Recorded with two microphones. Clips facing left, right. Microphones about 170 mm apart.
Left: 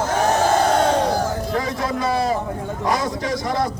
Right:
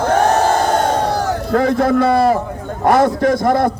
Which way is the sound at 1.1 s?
70° right (ahead or behind).